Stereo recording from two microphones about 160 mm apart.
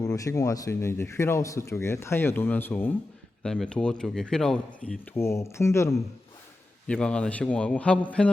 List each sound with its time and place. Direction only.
0.0 s speech: 20° left (ahead or behind)
6.8 s speech: 5° left (ahead or behind)